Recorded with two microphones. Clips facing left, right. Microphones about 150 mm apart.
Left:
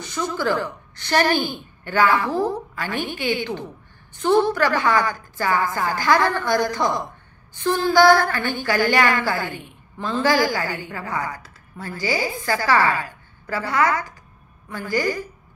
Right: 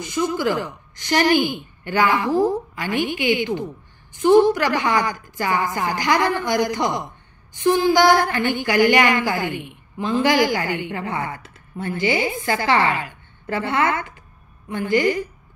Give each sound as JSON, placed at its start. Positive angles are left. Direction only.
{"t": 0.0, "sound": "a woman's voice", "side_deg": -15}